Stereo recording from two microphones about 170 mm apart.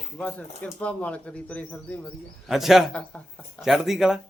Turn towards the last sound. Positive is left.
turn(degrees=0)  # may be behind; listen again after turning